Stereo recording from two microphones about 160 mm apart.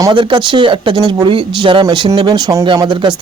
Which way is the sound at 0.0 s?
30° right (ahead or behind).